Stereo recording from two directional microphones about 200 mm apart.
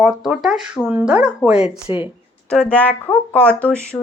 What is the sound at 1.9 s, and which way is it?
Speech, 25° left (ahead or behind).